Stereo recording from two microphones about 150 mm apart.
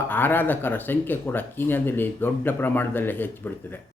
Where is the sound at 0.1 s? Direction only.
15° left (ahead or behind).